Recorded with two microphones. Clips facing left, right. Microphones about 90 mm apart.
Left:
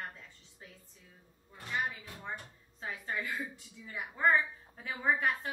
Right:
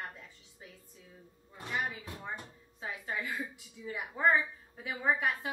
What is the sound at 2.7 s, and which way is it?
A woman's voice, 5° right (ahead or behind).